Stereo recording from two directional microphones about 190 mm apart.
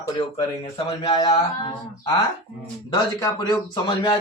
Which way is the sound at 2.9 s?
20° left (ahead or behind).